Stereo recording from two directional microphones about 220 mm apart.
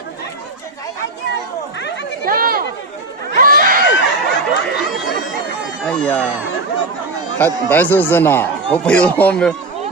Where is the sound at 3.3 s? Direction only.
40° right (ahead or behind).